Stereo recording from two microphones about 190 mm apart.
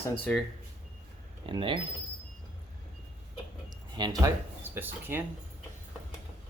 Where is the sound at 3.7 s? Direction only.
20° right (ahead or behind).